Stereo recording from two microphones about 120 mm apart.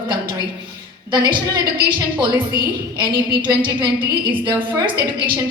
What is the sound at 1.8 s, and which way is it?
Speech, 40° right (ahead or behind).